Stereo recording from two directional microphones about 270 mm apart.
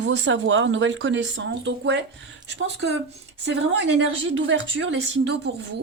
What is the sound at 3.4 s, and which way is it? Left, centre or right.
Speech, right.